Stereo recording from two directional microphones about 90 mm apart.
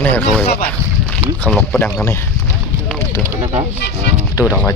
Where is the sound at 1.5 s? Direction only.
15° left (ahead or behind).